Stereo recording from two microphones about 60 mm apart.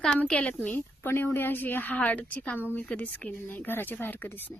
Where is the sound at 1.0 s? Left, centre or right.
Left.